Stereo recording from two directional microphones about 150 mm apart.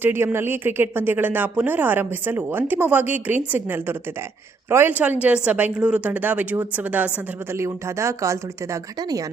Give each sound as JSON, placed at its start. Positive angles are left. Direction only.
{"t": 0.0, "sound": "speech", "side_deg": -15}